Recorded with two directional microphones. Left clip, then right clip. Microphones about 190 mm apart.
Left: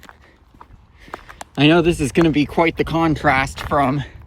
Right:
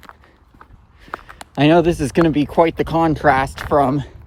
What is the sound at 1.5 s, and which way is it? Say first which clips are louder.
Speech: right 1 dB; 40° right (ahead or behind).